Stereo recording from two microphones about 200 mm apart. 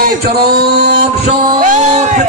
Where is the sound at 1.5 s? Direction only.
35° right (ahead or behind).